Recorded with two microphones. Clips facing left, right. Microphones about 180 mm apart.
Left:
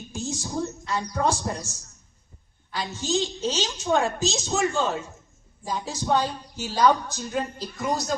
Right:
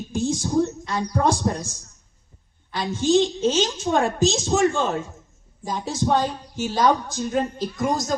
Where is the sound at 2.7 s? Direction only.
50° right (ahead or behind).